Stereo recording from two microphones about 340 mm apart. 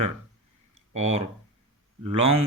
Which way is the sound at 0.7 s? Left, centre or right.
Centre.